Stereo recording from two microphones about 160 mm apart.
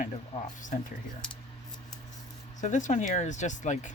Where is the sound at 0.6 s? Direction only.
50° left (ahead or behind).